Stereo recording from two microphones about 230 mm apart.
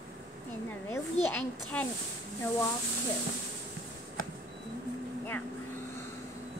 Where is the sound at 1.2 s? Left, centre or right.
Centre.